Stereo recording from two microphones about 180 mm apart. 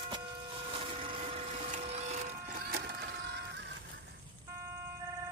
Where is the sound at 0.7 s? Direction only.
30° right (ahead or behind); by 3.7 s 65° right (ahead or behind).